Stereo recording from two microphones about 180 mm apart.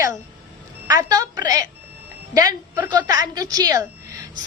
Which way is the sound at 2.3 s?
20° right (ahead or behind).